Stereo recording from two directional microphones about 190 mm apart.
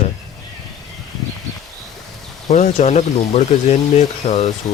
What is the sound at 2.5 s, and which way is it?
Speech, 35° left (ahead or behind).